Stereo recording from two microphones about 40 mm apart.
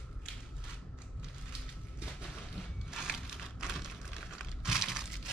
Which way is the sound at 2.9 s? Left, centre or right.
Centre.